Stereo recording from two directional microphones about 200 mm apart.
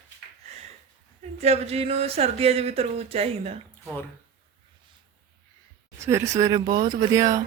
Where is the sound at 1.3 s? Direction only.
30° right (ahead or behind).